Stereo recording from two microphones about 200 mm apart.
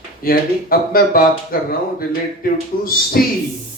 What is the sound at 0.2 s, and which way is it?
Speech, 45° left (ahead or behind).